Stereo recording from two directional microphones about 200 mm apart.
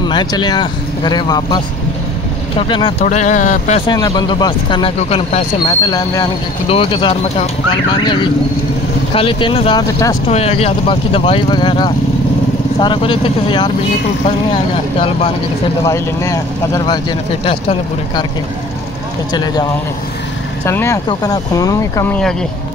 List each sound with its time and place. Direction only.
0.0 s speech: 20° left (ahead or behind)
2.7 s speech: 25° left (ahead or behind)
3.1 s speech: 35° left (ahead or behind)
3.8 s speech: 20° left (ahead or behind)
5.8 s speech: 20° left (ahead or behind)
10.2 s speech: 30° left (ahead or behind)
15.8 s speech: 15° left (ahead or behind)
19.3 s speech: 20° left (ahead or behind)
20.6 s speech: 15° left (ahead or behind)